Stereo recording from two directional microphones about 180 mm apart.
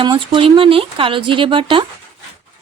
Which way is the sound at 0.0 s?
30° right (ahead or behind).